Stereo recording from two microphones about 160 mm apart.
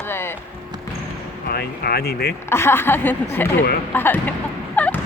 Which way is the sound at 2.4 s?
15° left (ahead or behind).